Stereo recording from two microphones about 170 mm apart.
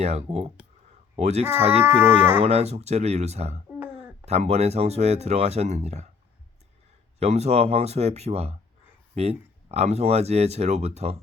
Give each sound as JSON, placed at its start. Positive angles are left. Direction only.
{"t": 0.0, "sound": "speech", "side_deg": -40}
{"t": 2.0, "sound": "speech", "side_deg": -10}
{"t": 2.4, "sound": "speech", "side_deg": -40}
{"t": 7.2, "sound": "speech", "side_deg": -40}